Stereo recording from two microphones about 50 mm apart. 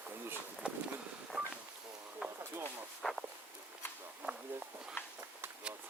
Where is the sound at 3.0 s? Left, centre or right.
Centre.